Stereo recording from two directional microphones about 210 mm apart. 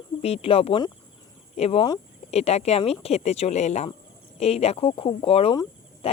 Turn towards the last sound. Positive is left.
turn(degrees=25)  # may be behind; listen again after turning